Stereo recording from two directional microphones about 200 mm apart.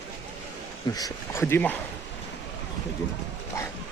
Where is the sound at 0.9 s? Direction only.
15° left (ahead or behind).